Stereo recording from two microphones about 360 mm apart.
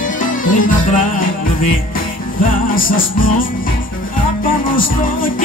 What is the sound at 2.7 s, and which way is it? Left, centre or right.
Music, left.